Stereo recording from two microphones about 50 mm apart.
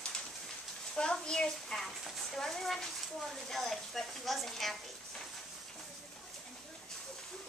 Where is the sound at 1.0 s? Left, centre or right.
Centre.